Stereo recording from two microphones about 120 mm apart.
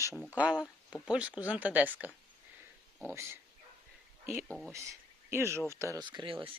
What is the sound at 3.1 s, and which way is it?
Speech, 20° right (ahead or behind).